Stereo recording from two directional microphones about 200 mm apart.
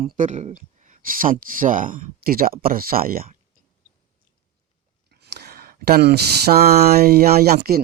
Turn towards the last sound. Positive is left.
turn(degrees=-50)  # may be behind; listen again after turning